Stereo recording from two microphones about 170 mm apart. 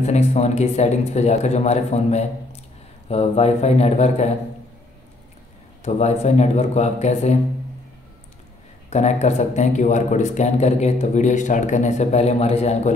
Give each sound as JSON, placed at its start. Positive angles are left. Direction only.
{"t": 0.0, "sound": "speech", "side_deg": 40}
{"t": 5.8, "sound": "speech", "side_deg": 40}
{"t": 8.9, "sound": "a man's voice", "side_deg": 40}